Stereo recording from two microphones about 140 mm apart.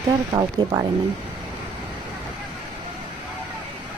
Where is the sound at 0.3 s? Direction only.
25° right (ahead or behind).